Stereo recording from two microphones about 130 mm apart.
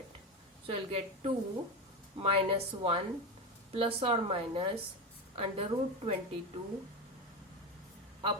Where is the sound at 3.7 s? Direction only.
45° right (ahead or behind).